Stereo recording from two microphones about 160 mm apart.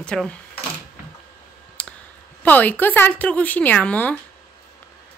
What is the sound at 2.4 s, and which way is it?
A woman's voice, 10° left (ahead or behind).